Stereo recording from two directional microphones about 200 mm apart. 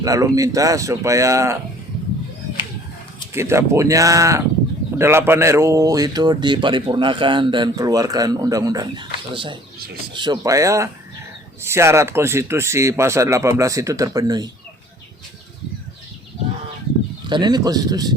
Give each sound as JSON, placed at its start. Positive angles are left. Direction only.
{"t": 0.0, "sound": "speech", "side_deg": -15}
{"t": 3.3, "sound": "speech", "side_deg": -15}
{"t": 17.2, "sound": "speech", "side_deg": -20}